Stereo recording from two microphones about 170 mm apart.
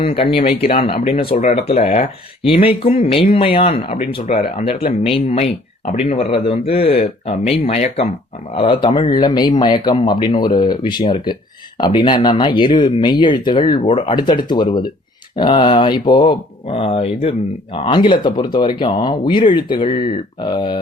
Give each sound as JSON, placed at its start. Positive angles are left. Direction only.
{"t": 0.0, "sound": "speech", "side_deg": 30}